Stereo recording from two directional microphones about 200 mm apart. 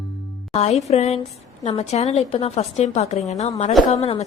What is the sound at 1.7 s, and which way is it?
A woman's voice, 35° left (ahead or behind).